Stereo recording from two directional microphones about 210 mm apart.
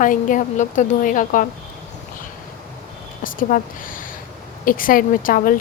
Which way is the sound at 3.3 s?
40° left (ahead or behind).